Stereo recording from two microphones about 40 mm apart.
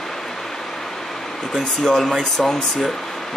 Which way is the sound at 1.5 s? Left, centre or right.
Centre.